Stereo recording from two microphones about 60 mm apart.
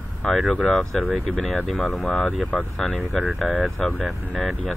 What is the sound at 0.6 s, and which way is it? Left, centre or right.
Speech, centre.